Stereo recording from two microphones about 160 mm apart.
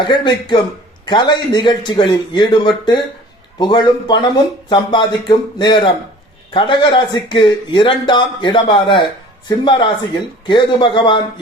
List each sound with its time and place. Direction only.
0.0 s speech: 30° left (ahead or behind)